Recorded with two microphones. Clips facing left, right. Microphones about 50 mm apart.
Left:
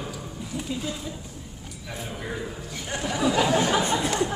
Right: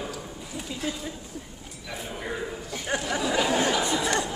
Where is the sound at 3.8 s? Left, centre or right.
Left.